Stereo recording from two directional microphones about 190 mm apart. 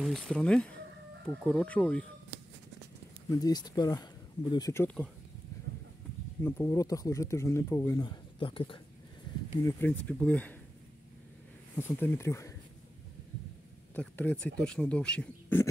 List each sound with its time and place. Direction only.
0.0 s speech: 5° left (ahead or behind)
3.3 s speech: 20° left (ahead or behind)
6.4 s speech: 15° left (ahead or behind)
9.7 s speech: 10° left (ahead or behind)
11.7 s speech: 15° left (ahead or behind)
13.9 s speech: 10° left (ahead or behind)